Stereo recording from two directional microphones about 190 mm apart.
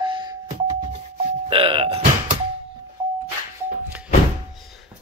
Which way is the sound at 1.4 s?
25° right (ahead or behind).